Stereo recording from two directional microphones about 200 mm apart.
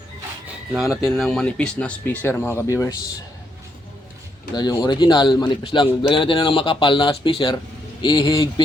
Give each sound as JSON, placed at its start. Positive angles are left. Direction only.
{"t": 0.4, "sound": "a sound", "side_deg": 0}
{"t": 1.0, "sound": "speech", "side_deg": 0}
{"t": 4.5, "sound": "a man's voice", "side_deg": 20}